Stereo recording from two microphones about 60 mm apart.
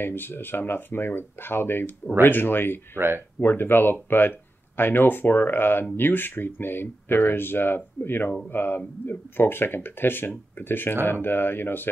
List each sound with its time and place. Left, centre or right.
0.0 s speech: left